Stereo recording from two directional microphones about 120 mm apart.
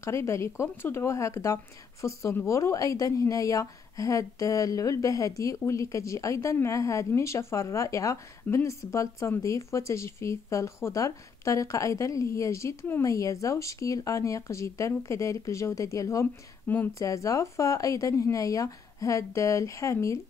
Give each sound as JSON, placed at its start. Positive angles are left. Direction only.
{"t": 0.0, "sound": "a woman's voice", "side_deg": 25}
{"t": 16.6, "sound": "speech", "side_deg": 15}
{"t": 17.0, "sound": "a woman's voice", "side_deg": 25}